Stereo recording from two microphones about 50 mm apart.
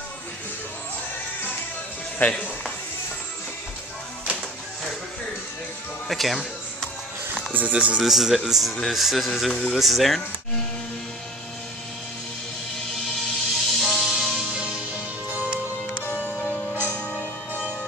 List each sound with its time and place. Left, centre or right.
2.1 s speech: left
6.0 s speech: centre
7.5 s speech: right
8.0 s a man's voice: centre
13.2 s music: centre
14.5 s music: centre
16.1 s music: left